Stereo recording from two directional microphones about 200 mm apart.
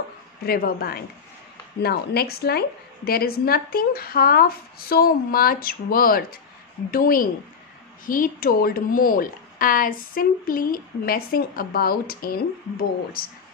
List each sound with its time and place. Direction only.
0.5 s speech: 50° left (ahead or behind)